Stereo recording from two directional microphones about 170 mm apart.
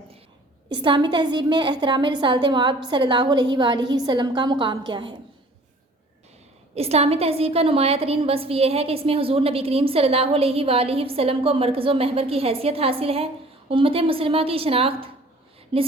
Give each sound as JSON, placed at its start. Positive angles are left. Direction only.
{"t": 0.7, "sound": "a woman's voice", "side_deg": -25}
{"t": 6.7, "sound": "a woman's voice", "side_deg": -35}